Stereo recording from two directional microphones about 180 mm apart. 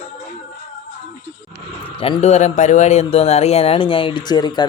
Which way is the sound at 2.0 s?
35° left (ahead or behind).